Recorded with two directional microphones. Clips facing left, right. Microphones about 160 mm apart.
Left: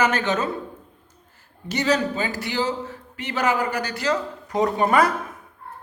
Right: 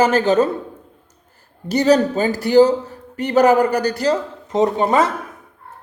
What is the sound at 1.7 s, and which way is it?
Speech, 40° right (ahead or behind).